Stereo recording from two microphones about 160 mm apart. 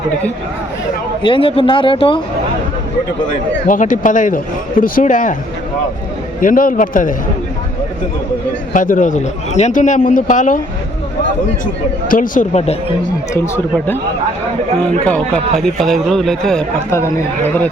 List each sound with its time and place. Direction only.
1.2 s speech: 35° left (ahead or behind)
3.7 s speech: 55° left (ahead or behind)
6.4 s speech: 60° left (ahead or behind)
8.7 s a man's voice: 55° left (ahead or behind)
11.6 s speech: 60° left (ahead or behind)
13.7 s speech: 10° left (ahead or behind)
15.0 s a man's voice: 10° left (ahead or behind)